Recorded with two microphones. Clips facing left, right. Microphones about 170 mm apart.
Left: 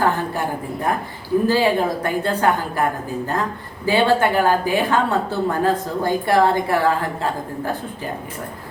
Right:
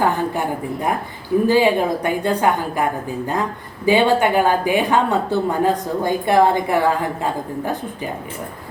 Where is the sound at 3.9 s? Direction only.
15° right (ahead or behind).